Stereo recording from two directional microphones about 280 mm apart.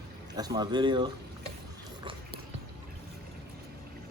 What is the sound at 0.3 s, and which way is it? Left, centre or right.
Speech, centre.